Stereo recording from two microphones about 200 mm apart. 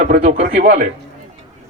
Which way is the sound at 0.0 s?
40° right (ahead or behind).